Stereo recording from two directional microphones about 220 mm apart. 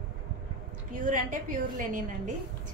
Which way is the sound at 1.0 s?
40° right (ahead or behind).